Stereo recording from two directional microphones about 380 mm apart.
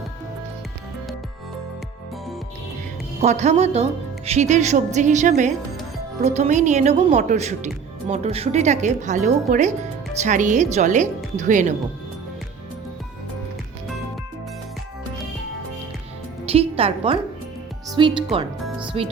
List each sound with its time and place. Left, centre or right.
3.2 s a woman's voice: centre
16.5 s a woman's voice: centre